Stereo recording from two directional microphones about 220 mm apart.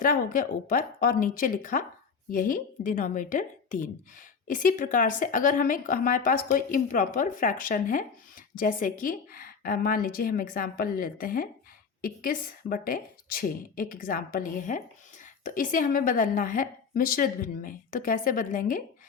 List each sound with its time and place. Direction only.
0.0 s a woman's voice: 40° left (ahead or behind)